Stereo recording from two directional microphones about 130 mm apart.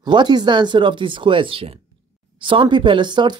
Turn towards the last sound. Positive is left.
turn(degrees=-35)  # may be behind; listen again after turning